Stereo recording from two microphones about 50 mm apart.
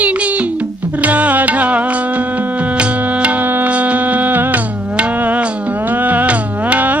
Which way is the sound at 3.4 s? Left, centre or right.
Right.